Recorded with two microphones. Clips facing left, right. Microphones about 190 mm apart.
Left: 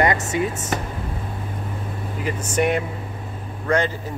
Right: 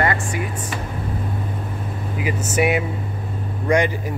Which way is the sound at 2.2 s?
5° right (ahead or behind).